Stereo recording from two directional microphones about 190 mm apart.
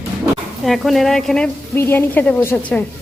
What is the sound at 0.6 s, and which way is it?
A woman's voice, centre (ahead or behind).